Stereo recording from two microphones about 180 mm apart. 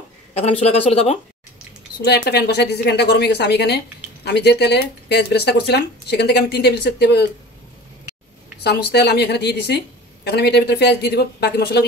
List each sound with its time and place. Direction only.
0.3 s speech: 35° left (ahead or behind)
2.0 s a woman's voice: 65° left (ahead or behind)
8.6 s speech: 65° left (ahead or behind)